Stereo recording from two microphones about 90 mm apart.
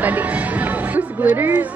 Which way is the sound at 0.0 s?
20° right (ahead or behind).